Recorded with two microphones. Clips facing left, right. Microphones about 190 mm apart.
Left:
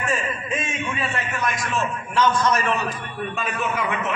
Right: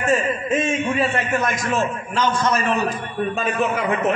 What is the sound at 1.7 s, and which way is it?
A man's voice, 35° right (ahead or behind).